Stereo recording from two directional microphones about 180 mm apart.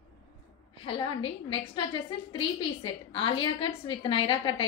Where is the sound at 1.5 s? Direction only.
25° left (ahead or behind).